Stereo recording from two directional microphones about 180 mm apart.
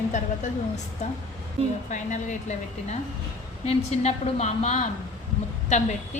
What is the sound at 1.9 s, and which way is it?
A woman's voice, 40° left (ahead or behind).